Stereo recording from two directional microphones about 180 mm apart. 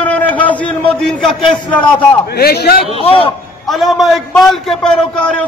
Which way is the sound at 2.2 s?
60° left (ahead or behind).